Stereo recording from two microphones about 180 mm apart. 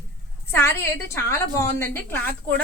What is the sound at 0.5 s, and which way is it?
A woman's voice, 15° left (ahead or behind).